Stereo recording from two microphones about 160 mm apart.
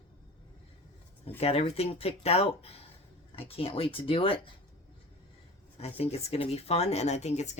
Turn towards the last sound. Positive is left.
turn(degrees=45)  # may be behind; listen again after turning